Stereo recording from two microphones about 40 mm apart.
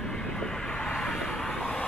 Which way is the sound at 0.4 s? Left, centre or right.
Centre.